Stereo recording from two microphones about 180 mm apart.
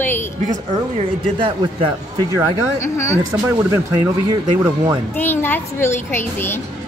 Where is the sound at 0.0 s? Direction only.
10° left (ahead or behind).